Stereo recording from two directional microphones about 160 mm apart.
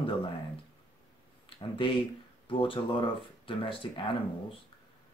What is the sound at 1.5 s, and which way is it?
Speech, 35° left (ahead or behind).